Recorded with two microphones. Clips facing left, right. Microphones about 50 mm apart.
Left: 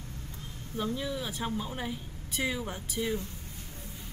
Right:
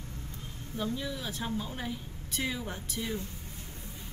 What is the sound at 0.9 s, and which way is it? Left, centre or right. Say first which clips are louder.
Speech: left 2 dB; centre.